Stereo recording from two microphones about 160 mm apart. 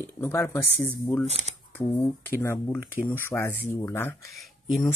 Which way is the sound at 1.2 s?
45° right (ahead or behind).